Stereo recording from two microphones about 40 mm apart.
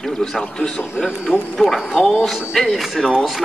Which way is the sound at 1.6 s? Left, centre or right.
Centre.